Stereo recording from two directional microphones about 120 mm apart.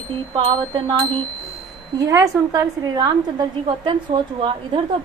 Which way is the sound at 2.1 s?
25° right (ahead or behind).